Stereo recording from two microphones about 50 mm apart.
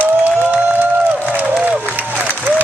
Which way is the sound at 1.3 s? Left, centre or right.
Right.